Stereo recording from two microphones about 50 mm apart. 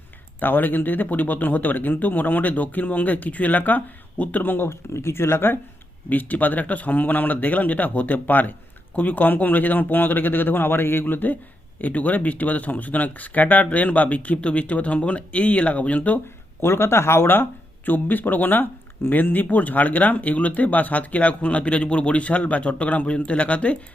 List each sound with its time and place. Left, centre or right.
0.3 s speech: left
6.1 s speech: left
16.6 s speech: left